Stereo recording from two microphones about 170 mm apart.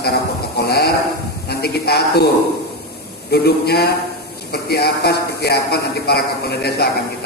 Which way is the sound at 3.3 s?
70° left (ahead or behind).